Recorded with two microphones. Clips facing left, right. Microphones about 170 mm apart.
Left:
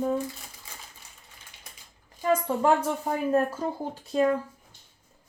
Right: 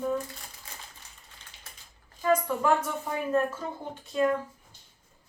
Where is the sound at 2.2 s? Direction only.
25° left (ahead or behind).